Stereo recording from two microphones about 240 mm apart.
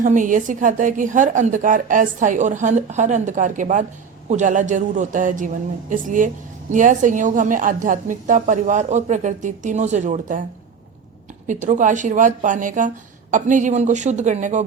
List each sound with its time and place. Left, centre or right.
0.0 s a woman's voice: right
11.4 s a woman's voice: right